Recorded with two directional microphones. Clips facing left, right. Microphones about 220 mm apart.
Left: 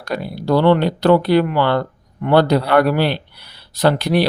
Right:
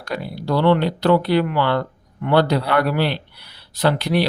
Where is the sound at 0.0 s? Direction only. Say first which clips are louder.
Left 3 dB; 45° left (ahead or behind).